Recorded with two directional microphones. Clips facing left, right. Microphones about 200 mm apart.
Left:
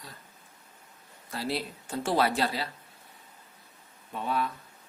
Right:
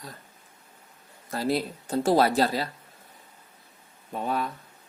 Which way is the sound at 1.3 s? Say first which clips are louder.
Right 6 dB; 45° right (ahead or behind).